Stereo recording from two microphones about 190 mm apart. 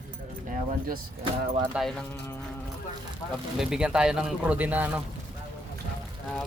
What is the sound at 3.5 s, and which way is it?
Speech, 5° right (ahead or behind).